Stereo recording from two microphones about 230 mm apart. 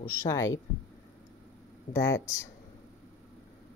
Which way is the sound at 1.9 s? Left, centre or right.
Centre.